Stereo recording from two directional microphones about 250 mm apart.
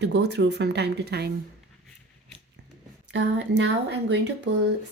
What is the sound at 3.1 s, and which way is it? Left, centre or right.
Speech, right.